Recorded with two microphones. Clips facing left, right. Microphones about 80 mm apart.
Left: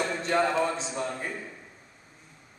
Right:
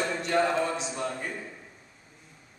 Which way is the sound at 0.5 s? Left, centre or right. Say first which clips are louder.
Left 1 dB; left.